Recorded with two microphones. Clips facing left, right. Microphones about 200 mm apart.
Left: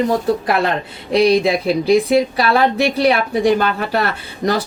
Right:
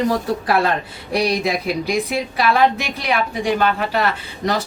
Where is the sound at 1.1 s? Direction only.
25° left (ahead or behind).